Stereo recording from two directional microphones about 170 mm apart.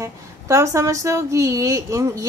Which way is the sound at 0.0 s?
15° right (ahead or behind).